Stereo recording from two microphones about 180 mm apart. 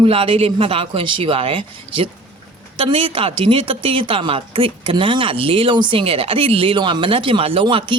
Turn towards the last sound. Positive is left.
turn(degrees=-30)  # may be behind; listen again after turning